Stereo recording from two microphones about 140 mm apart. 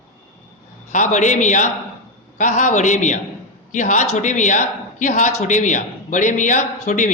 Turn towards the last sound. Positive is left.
turn(degrees=65)  # may be behind; listen again after turning